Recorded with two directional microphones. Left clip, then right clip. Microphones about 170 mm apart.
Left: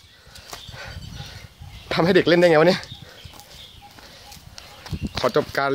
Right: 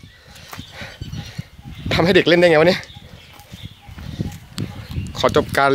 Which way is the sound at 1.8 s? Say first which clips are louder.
Right 3 dB; 15° right (ahead or behind).